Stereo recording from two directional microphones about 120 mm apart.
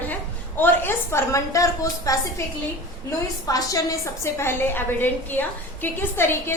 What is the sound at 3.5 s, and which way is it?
A woman's voice, 30° left (ahead or behind).